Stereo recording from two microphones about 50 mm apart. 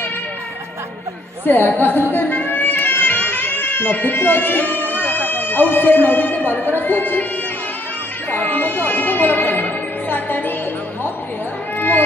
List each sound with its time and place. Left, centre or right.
1.4 s a woman's voice: left
2.1 s a sound: left
8.3 s music: left